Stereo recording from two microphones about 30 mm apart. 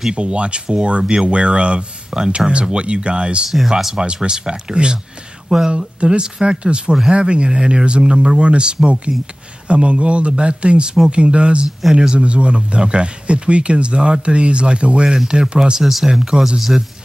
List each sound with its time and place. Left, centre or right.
0.1 s speech: right
2.0 s speech: right
2.3 s speech: right
3.4 s speech: centre
4.0 s speech: right
5.5 s speech: centre
5.9 s speech: right
15.8 s speech: centre
16.1 s speech: right